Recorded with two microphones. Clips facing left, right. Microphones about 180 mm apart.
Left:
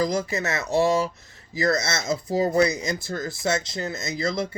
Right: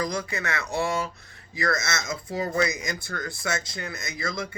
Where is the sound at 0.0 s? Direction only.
25° left (ahead or behind).